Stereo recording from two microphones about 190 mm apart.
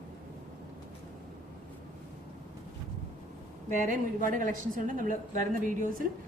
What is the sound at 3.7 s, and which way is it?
A woman's voice, 45° right (ahead or behind).